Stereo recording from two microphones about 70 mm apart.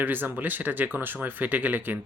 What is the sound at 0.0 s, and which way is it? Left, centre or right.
Speech, right.